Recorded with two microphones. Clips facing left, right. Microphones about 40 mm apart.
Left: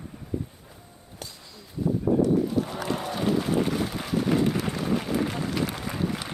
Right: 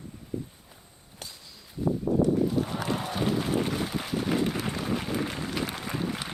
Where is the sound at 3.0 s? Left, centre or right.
Right.